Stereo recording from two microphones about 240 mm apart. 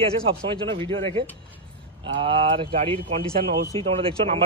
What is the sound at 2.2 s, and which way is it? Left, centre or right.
Speech, right.